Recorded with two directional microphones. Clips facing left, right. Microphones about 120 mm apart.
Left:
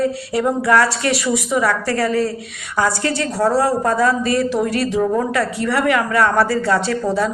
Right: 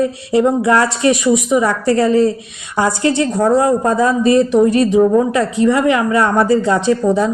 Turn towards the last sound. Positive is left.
turn(degrees=-20)  # may be behind; listen again after turning